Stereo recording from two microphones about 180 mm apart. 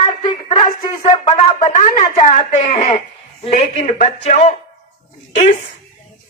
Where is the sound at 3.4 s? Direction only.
30° left (ahead or behind).